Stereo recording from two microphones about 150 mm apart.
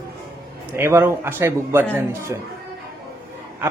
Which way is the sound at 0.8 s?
15° right (ahead or behind).